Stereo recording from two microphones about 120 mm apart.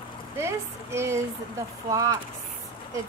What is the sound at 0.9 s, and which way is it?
Speech, 20° right (ahead or behind).